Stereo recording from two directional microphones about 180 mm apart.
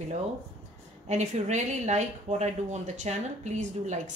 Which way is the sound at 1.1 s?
40° right (ahead or behind).